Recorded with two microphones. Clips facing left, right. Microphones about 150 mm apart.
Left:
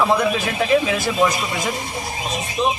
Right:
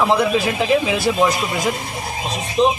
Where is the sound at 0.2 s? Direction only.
10° right (ahead or behind).